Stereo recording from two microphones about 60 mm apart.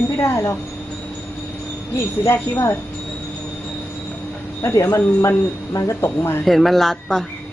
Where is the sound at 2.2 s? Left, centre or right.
Left.